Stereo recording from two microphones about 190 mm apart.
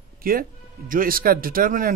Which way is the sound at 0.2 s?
50° right (ahead or behind).